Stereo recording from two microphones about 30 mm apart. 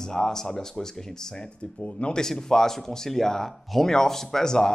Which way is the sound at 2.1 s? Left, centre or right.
Centre.